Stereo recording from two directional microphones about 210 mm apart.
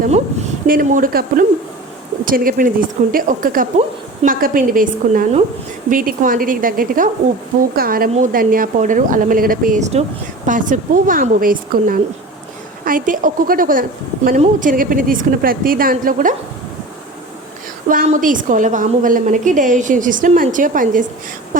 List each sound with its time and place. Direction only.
0.7 s a woman's voice: 40° right (ahead or behind)
3.8 s a woman's voice: 30° right (ahead or behind)
4.4 s a woman's voice: 45° right (ahead or behind)
17.8 s a woman's voice: 35° right (ahead or behind)